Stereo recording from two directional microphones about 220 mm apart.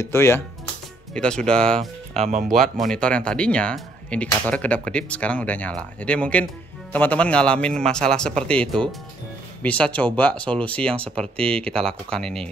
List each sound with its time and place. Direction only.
0.0 s speech: 10° left (ahead or behind)
2.1 s speech: 30° right (ahead or behind)
2.6 s speech: centre (ahead or behind)